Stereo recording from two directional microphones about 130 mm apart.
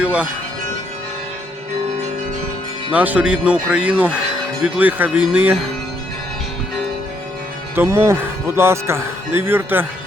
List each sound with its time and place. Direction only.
0.0 s music: 10° right (ahead or behind)
2.9 s speech: 10° right (ahead or behind)
7.8 s speech: 20° right (ahead or behind)